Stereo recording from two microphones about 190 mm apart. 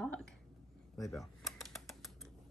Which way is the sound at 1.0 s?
Centre (ahead or behind).